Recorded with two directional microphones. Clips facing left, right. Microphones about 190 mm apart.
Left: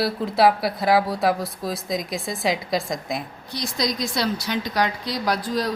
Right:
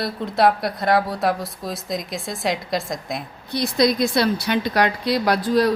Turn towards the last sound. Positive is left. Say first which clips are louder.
# right 6 dB
turn(degrees=-65)  # may be behind; listen again after turning